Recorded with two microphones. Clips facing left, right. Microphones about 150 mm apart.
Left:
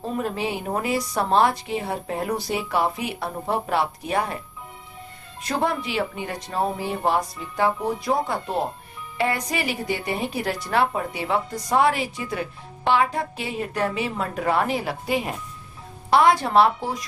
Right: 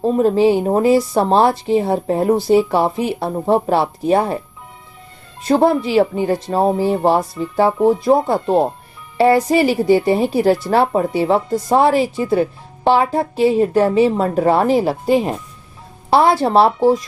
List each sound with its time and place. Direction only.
0.0 s a woman's voice: 35° right (ahead or behind)
5.4 s a woman's voice: 30° right (ahead or behind)